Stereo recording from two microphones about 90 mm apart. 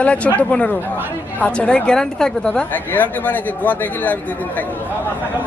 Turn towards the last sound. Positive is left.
turn(degrees=20)  # may be behind; listen again after turning